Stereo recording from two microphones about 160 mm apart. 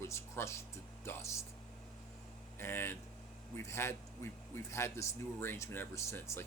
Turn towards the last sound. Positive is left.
turn(degrees=15)  # may be behind; listen again after turning